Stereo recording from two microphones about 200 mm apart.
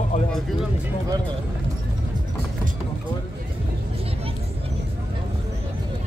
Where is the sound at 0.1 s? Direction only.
40° left (ahead or behind).